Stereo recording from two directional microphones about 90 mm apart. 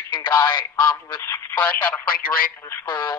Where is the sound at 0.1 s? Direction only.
55° left (ahead or behind).